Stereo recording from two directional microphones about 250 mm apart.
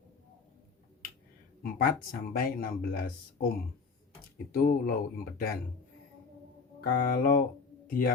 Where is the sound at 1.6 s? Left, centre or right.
Left.